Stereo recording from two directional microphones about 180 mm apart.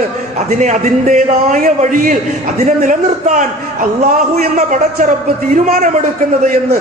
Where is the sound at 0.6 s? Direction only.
40° right (ahead or behind).